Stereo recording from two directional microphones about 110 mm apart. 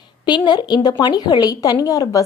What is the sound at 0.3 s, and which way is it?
A woman's voice, 45° left (ahead or behind).